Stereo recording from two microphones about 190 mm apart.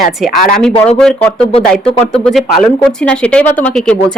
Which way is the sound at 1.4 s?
30° left (ahead or behind).